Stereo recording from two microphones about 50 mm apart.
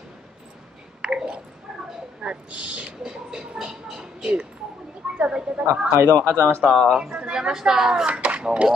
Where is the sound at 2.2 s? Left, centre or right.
Right; by 4.3 s centre.